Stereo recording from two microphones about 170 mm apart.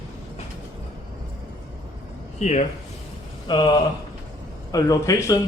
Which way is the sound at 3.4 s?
25° left (ahead or behind).